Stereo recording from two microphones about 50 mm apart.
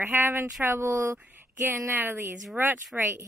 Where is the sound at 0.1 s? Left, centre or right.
Right.